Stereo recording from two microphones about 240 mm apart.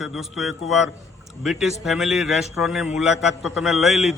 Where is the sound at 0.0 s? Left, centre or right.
Centre.